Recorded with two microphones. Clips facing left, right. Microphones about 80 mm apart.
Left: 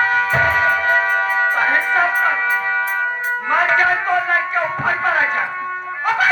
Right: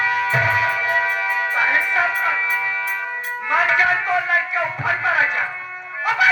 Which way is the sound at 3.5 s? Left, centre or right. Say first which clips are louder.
Left 2 dB; left.